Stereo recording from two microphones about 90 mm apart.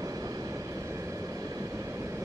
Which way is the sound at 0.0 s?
40° right (ahead or behind).